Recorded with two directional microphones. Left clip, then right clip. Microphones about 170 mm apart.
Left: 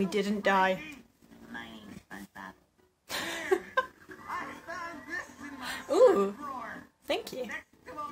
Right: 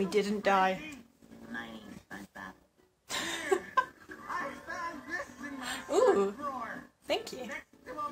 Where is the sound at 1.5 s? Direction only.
30° left (ahead or behind).